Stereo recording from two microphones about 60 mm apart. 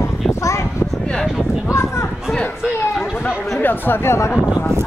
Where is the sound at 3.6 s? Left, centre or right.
Left.